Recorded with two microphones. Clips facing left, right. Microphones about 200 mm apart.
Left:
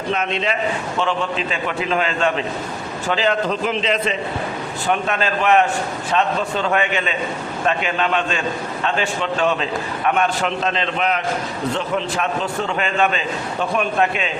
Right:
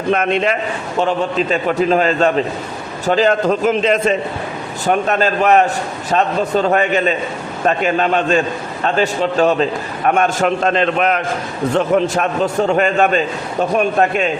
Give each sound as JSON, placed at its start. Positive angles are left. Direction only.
{"t": 0.1, "sound": "a man's voice", "side_deg": -55}
{"t": 0.9, "sound": "a man's voice", "side_deg": -40}